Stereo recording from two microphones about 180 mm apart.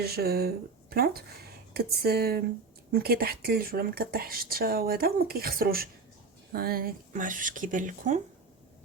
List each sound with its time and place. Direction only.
0.0 s speech: 60° right (ahead or behind)